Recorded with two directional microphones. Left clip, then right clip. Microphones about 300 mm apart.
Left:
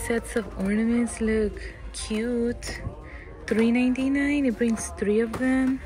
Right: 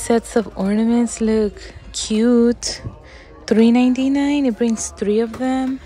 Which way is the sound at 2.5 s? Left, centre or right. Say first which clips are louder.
Right 10 dB; centre.